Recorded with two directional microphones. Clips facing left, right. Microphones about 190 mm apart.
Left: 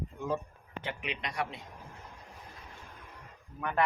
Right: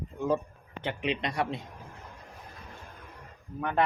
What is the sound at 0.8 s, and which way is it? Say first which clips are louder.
Speech: right 8 dB; 30° right (ahead or behind).